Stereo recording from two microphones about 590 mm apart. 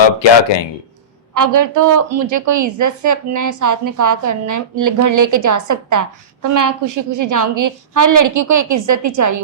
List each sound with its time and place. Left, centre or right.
0.0 s speech: left
1.3 s a woman's voice: right